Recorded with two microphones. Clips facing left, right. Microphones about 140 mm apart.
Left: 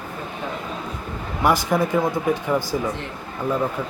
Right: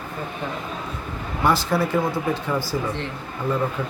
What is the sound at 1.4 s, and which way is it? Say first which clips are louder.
Speech: left 1 dB; 15° left (ahead or behind).